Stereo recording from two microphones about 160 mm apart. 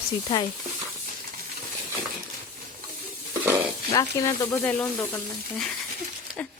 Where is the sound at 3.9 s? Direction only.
20° left (ahead or behind).